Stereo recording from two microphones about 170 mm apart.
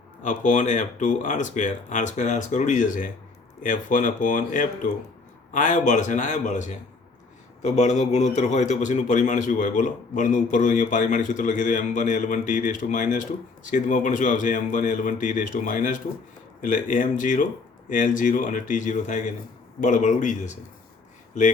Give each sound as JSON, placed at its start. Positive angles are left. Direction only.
{"t": 0.2, "sound": "a man's voice", "side_deg": 45}